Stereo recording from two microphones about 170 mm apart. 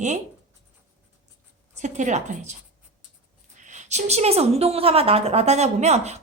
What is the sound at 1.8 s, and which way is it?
Speech, 45° right (ahead or behind).